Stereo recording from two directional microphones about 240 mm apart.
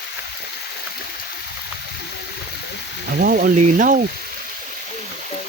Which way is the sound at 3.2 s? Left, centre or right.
Right.